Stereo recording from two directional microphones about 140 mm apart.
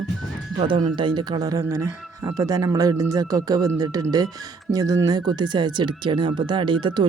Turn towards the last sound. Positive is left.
turn(degrees=-35)  # may be behind; listen again after turning